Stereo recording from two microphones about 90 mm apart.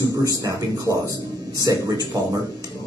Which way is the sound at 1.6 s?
45° right (ahead or behind).